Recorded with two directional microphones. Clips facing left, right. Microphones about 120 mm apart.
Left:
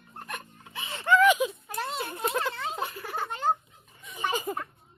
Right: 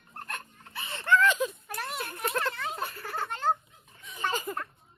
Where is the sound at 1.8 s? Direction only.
25° left (ahead or behind).